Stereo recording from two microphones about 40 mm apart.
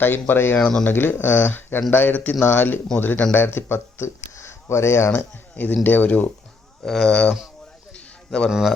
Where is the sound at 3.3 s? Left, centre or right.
Left.